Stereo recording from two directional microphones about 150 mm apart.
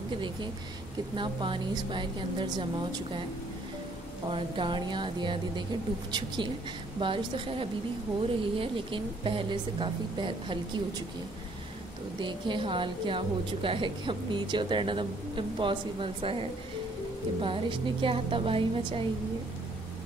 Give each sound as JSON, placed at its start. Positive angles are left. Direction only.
{"t": 1.1, "sound": "a woman's voice", "side_deg": -35}
{"t": 4.3, "sound": "a woman's voice", "side_deg": -35}
{"t": 12.2, "sound": "a woman's voice", "side_deg": -30}